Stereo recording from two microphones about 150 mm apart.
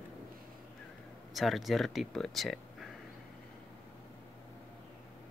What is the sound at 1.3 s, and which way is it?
Speech, centre (ahead or behind).